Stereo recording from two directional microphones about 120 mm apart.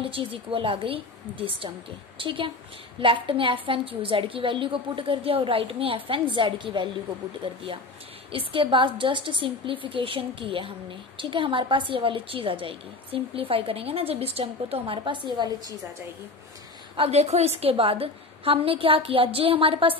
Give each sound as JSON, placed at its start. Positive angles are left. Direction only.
{"t": 0.0, "sound": "a woman's voice", "side_deg": -50}
{"t": 16.9, "sound": "a woman's voice", "side_deg": -55}